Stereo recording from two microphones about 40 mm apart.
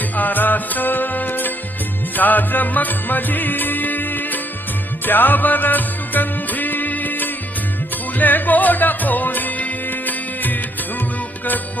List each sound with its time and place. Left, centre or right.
0.2 s music: left